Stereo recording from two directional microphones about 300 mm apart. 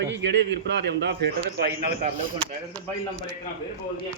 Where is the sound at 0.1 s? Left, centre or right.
Right.